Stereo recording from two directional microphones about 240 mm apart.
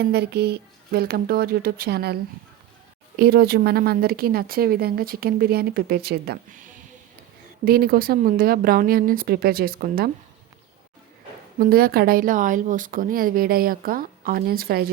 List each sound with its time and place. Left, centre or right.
0.0 s speech: right
3.2 s speech: right
11.6 s speech: right